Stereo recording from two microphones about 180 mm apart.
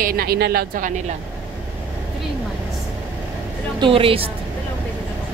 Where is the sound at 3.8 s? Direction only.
30° right (ahead or behind).